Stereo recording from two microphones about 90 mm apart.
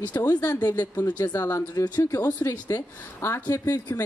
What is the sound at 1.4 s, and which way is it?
Speech, 35° left (ahead or behind).